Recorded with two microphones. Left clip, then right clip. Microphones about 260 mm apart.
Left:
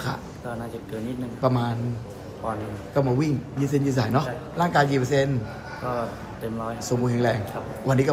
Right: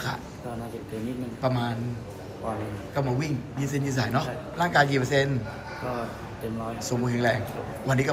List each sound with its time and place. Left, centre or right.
1.4 s a man's voice: centre
2.9 s a man's voice: centre
6.8 s speech: centre